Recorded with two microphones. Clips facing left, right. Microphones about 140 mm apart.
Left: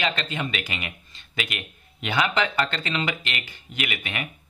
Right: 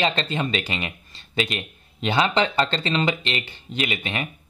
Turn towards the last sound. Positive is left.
turn(degrees=-30)  # may be behind; listen again after turning